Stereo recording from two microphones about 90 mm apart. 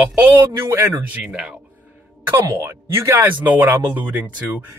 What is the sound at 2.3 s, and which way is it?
Speech, 30° right (ahead or behind).